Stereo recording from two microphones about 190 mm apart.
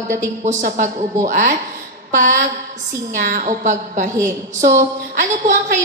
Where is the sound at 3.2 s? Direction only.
45° right (ahead or behind).